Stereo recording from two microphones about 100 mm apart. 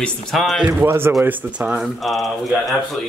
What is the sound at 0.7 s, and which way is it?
A man's voice, 20° right (ahead or behind).